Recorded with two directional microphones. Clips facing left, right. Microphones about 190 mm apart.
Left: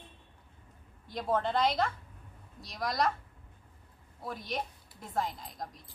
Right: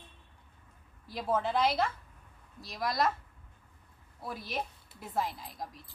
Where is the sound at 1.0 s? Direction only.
5° right (ahead or behind).